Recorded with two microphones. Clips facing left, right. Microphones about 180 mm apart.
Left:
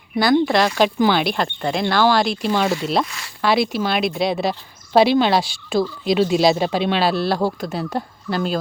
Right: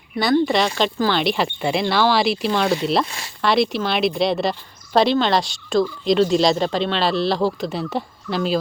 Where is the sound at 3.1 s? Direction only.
30° right (ahead or behind).